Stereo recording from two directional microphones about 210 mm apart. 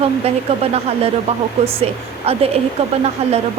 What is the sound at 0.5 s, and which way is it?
Speech, 30° right (ahead or behind).